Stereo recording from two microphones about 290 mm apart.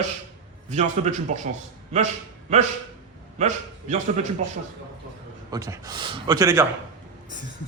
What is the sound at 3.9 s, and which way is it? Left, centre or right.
Speech, right.